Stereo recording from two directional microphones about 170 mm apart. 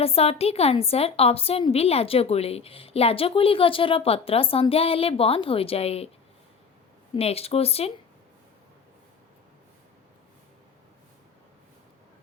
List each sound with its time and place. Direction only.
0.0 s a woman's voice: 35° left (ahead or behind)
7.2 s a woman's voice: 35° left (ahead or behind)